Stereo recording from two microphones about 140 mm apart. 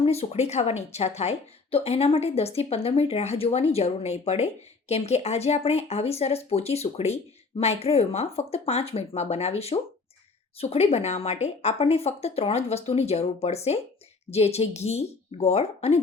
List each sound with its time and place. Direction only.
0.0 s speech: 45° left (ahead or behind)